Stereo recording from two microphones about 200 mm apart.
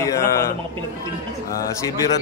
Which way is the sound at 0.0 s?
15° left (ahead or behind).